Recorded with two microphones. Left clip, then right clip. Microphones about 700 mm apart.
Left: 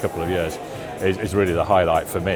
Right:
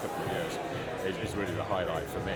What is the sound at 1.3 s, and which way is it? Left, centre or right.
Speech, left.